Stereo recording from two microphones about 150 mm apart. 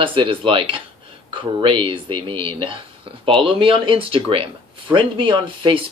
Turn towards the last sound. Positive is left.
turn(degrees=-35)  # may be behind; listen again after turning